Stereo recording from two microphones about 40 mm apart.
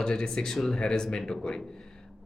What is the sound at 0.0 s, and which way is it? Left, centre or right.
Speech, left.